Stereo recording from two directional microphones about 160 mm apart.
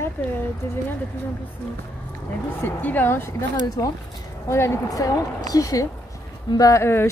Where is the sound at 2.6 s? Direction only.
10° left (ahead or behind).